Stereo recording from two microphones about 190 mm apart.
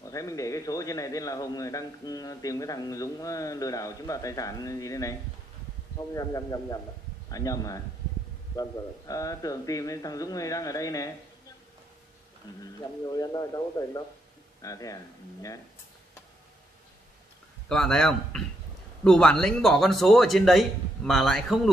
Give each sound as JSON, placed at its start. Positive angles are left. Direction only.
{"t": 0.0, "sound": "a man's voice", "side_deg": 15}
{"t": 12.4, "sound": "a man's voice", "side_deg": 20}
{"t": 17.6, "sound": "speech", "side_deg": 5}